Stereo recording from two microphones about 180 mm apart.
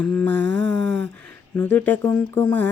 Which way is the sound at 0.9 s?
10° left (ahead or behind).